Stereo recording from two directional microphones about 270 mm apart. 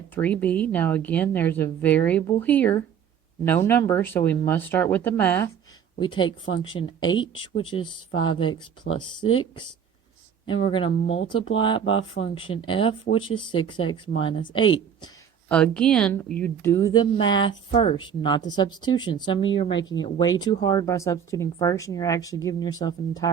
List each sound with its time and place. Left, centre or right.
0.1 s speech: centre
7.0 s speech: centre
8.9 s speech: left
10.4 s speech: centre
15.0 s speech: centre